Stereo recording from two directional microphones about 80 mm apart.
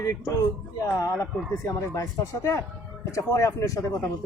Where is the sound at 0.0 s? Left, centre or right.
Left.